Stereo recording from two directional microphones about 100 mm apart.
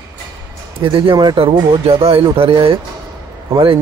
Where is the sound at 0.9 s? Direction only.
55° right (ahead or behind).